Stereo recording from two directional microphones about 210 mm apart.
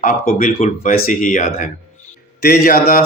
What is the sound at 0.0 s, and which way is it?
Speech, 40° left (ahead or behind).